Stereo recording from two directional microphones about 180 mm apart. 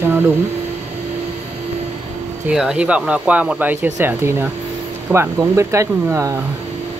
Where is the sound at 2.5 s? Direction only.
5° right (ahead or behind).